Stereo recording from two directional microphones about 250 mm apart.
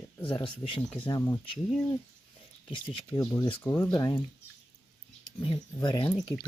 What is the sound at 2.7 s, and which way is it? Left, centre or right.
Speech, centre.